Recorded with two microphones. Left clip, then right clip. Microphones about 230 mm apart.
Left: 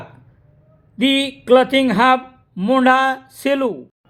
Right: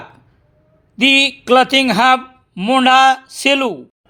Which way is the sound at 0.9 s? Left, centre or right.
Centre.